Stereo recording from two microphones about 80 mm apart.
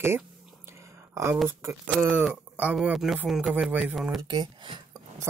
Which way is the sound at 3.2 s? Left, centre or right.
Centre.